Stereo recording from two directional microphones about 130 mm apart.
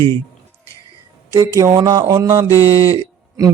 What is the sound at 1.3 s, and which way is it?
Mantra, 25° right (ahead or behind).